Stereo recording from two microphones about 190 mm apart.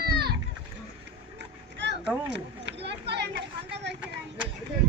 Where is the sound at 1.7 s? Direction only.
65° right (ahead or behind).